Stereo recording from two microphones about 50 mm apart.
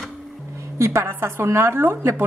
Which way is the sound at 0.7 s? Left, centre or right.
Right.